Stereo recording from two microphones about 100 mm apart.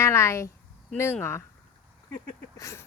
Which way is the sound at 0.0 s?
30° left (ahead or behind).